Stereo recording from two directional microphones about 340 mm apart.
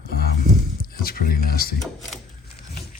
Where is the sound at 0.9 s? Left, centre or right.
Left.